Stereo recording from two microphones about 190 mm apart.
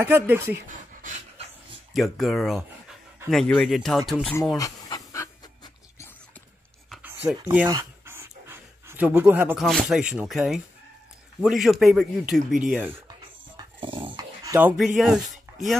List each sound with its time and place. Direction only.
0.0 s a woman's voice: 10° right (ahead or behind)
0.7 s a sound: 40° right (ahead or behind)
2.0 s speech: centre (ahead or behind)
4.6 s pant: 20° left (ahead or behind)
6.9 s a sound: 10° right (ahead or behind)
7.5 s pant: 10° right (ahead or behind)
9.7 s speech: centre (ahead or behind)
13.6 s dog: 25° right (ahead or behind)
15.0 s speech: centre (ahead or behind)